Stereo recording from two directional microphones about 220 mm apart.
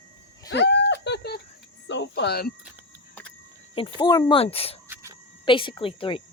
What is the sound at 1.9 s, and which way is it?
Speech, 55° left (ahead or behind).